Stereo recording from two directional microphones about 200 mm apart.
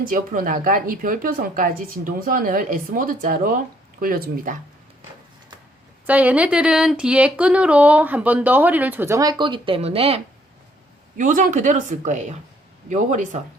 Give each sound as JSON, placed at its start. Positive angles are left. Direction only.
{"t": 0.0, "sound": "speech", "side_deg": -45}
{"t": 6.1, "sound": "speech", "side_deg": -5}
{"t": 11.2, "sound": "speech", "side_deg": -40}